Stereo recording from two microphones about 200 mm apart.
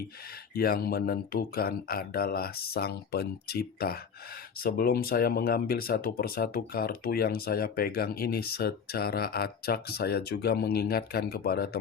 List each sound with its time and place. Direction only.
0.5 s speech: 50° left (ahead or behind)